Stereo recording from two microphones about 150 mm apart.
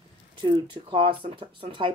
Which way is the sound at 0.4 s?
35° right (ahead or behind).